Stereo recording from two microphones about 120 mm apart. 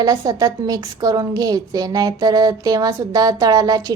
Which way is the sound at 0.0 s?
30° right (ahead or behind).